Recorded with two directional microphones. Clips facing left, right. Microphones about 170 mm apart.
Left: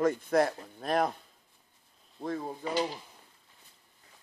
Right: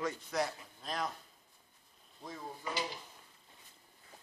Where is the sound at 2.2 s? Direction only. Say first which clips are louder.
Left 11 dB; 60° left (ahead or behind).